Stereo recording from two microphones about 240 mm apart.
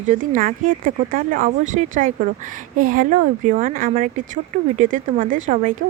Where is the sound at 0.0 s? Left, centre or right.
Right.